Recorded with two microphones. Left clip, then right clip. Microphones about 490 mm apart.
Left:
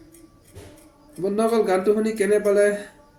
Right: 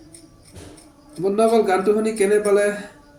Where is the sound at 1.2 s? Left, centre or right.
Left.